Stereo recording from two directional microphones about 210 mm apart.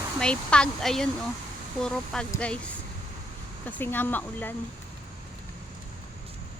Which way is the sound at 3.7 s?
10° left (ahead or behind).